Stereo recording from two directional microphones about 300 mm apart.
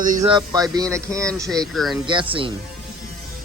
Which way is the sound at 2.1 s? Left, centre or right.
Centre.